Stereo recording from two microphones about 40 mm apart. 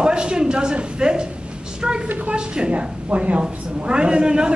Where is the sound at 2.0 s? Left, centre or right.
Right.